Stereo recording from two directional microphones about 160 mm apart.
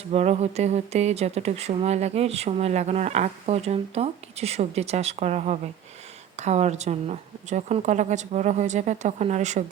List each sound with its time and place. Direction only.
0.1 s speech: 45° right (ahead or behind)